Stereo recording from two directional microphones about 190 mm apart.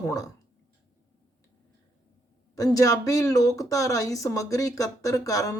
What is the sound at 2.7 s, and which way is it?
Speech, 15° left (ahead or behind).